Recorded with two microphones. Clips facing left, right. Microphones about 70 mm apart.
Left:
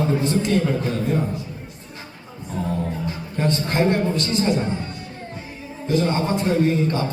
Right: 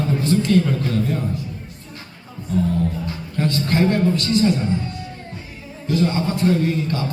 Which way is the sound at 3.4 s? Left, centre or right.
Left.